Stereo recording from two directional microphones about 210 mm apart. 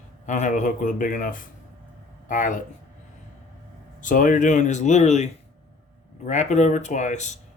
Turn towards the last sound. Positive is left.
turn(degrees=35)  # may be behind; listen again after turning